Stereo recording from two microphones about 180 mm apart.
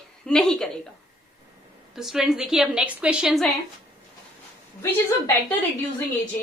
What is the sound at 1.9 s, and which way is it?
A woman's voice, centre (ahead or behind).